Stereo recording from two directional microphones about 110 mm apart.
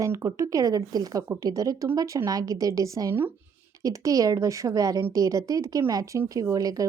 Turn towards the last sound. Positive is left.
turn(degrees=-35)  # may be behind; listen again after turning